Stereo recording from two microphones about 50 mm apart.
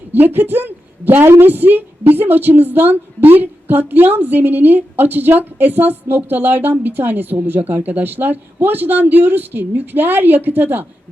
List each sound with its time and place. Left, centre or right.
0.1 s a woman's voice: right